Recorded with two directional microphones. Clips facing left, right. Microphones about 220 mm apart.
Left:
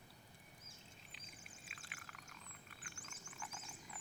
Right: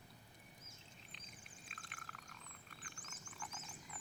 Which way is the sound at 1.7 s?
Centre (ahead or behind).